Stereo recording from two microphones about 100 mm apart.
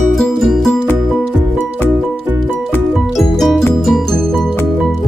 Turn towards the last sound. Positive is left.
turn(degrees=5)  # may be behind; listen again after turning